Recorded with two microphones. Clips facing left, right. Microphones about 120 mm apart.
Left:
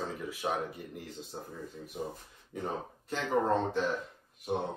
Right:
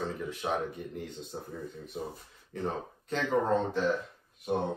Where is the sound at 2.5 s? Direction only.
5° left (ahead or behind).